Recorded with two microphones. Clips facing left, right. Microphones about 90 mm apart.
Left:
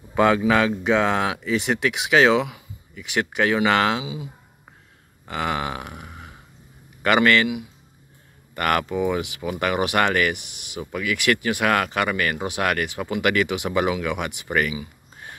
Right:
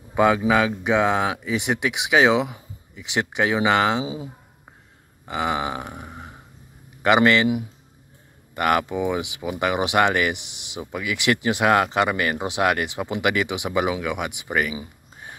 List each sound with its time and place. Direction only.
0.1 s speech: 10° right (ahead or behind)
4.0 s speech: 35° right (ahead or behind)
5.2 s speech: 15° right (ahead or behind)
6.0 s a sound: 15° right (ahead or behind)
7.0 s a man's voice: 20° right (ahead or behind)
8.5 s speech: 15° right (ahead or behind)